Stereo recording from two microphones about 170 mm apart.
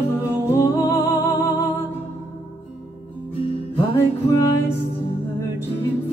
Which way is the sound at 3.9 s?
15° left (ahead or behind).